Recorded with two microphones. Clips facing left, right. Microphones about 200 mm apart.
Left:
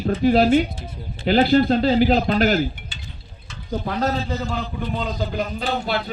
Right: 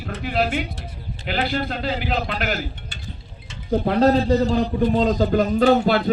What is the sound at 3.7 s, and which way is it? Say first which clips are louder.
A man's voice: right 7 dB; 30° right (ahead or behind).